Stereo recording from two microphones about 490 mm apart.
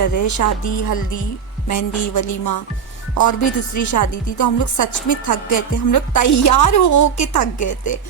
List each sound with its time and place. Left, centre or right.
0.0 s a woman's voice: left